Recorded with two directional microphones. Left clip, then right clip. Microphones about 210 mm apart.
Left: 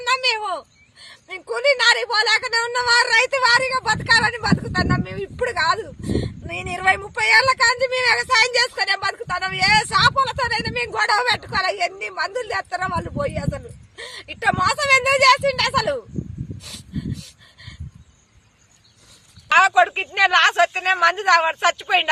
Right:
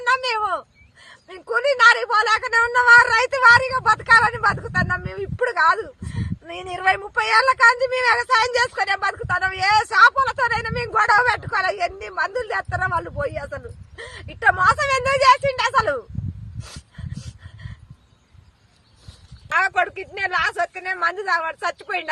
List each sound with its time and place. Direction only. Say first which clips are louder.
0.0 s a sound: even; centre (ahead or behind)
1.0 s speech: left 1 dB; centre (ahead or behind)
19.5 s speech: left 5 dB; 20° right (ahead or behind)